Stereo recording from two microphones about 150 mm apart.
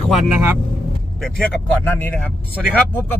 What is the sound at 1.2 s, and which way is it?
Speech, 10° left (ahead or behind).